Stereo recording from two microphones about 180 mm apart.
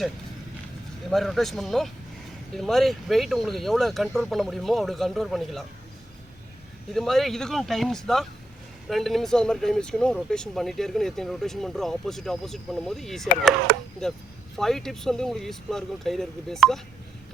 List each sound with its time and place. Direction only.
1.1 s speech: centre (ahead or behind)
6.9 s speech: centre (ahead or behind)
13.7 s speech: 60° right (ahead or behind)
14.5 s speech: centre (ahead or behind)